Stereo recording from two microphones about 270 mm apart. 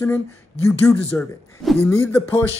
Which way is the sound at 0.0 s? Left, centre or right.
Centre.